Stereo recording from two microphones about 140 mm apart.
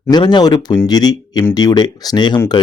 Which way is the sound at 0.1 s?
30° left (ahead or behind).